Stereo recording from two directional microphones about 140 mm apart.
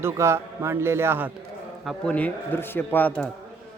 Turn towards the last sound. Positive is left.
turn(degrees=10)  # may be behind; listen again after turning